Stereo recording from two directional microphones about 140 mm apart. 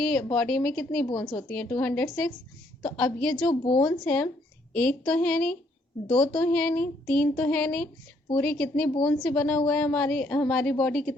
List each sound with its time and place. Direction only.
0.0 s a woman's voice: 5° left (ahead or behind)
1.0 s a woman's voice: 25° left (ahead or behind)
1.4 s a woman's voice: 5° left (ahead or behind)
3.5 s a woman's voice: 35° left (ahead or behind)
3.8 s a woman's voice: 10° left (ahead or behind)
8.9 s a woman's voice: 35° left (ahead or behind)
9.2 s a woman's voice: 5° left (ahead or behind)